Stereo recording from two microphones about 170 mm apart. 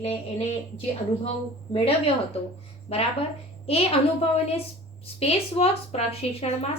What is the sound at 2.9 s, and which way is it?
A woman's voice, 35° left (ahead or behind).